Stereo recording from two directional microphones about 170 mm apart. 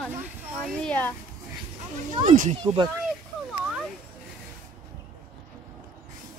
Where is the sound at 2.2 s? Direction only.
50° right (ahead or behind).